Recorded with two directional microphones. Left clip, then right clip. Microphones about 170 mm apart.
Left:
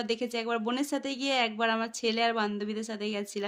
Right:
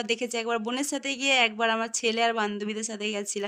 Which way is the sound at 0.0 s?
60° right (ahead or behind).